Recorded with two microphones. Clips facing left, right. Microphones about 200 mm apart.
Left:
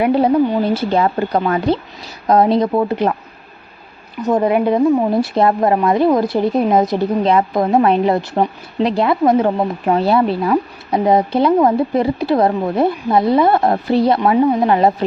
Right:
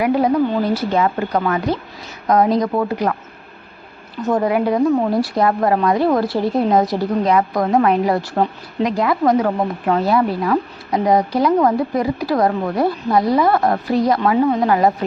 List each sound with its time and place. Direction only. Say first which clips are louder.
0.0 s a woman's voice: left 2 dB; 30° left (ahead or behind)
4.2 s a woman's voice: left 2 dB; 20° left (ahead or behind)